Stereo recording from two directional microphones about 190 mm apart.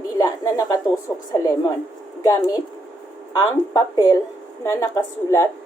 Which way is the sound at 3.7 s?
15° left (ahead or behind).